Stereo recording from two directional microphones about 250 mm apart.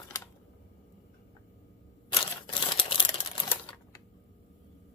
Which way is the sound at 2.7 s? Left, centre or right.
Centre.